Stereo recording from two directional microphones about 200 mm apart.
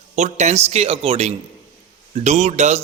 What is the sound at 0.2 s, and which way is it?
A man's voice, 35° right (ahead or behind).